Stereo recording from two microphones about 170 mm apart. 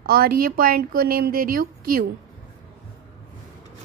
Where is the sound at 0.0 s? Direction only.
60° right (ahead or behind).